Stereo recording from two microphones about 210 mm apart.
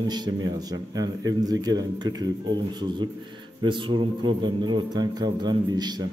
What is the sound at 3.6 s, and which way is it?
A man's voice, 25° right (ahead or behind).